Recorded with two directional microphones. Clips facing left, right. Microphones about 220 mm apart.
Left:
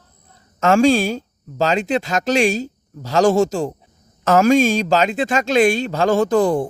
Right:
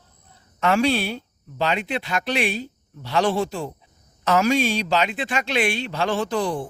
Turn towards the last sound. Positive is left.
turn(degrees=45)  # may be behind; listen again after turning